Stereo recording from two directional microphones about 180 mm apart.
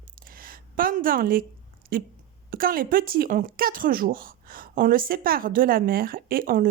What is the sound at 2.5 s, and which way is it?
Speech, 50° right (ahead or behind).